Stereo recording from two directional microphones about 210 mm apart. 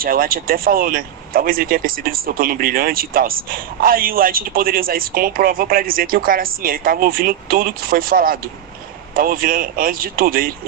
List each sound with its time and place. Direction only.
0.0 s speech: 45° right (ahead or behind)